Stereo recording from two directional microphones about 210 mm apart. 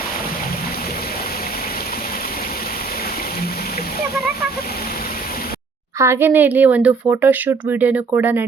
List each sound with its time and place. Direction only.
6.0 s speech: 10° right (ahead or behind)